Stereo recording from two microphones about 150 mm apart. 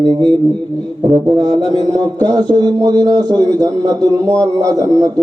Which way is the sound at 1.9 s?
25° right (ahead or behind).